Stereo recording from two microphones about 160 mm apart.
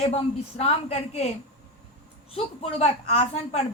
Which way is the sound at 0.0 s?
40° left (ahead or behind).